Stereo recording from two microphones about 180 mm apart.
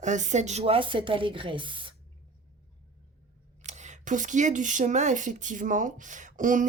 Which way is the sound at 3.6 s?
40° right (ahead or behind).